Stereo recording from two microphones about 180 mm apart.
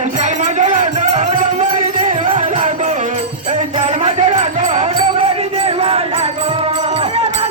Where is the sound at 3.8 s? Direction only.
40° right (ahead or behind).